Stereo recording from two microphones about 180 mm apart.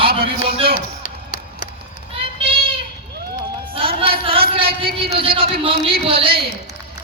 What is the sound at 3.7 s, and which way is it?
Music, 30° right (ahead or behind).